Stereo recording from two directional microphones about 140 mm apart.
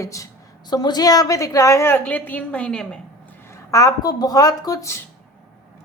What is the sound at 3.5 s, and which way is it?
A woman's voice, 25° left (ahead or behind).